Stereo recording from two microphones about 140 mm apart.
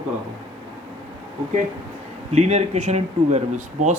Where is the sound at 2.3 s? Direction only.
55° right (ahead or behind).